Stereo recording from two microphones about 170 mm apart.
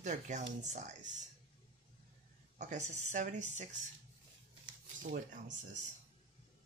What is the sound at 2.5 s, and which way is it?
Speech, 45° right (ahead or behind).